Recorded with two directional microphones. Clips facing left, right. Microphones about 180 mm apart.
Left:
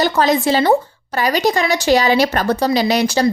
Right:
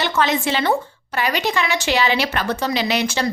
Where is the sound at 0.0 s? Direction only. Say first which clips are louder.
Left 5 dB; 40° left (ahead or behind).